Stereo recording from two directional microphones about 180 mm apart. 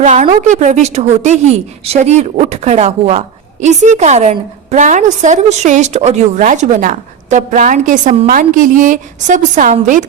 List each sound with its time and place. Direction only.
0.0 s a woman's voice: 40° right (ahead or behind)